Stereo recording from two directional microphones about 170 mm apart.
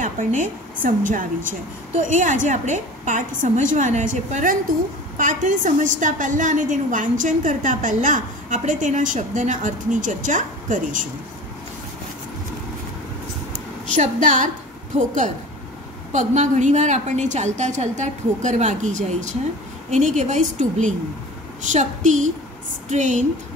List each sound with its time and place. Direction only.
0.0 s a woman's voice: 45° right (ahead or behind)
13.9 s a woman's voice: 50° right (ahead or behind)